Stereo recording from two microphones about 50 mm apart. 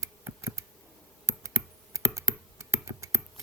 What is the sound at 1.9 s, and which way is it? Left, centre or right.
Computer keyboard, right.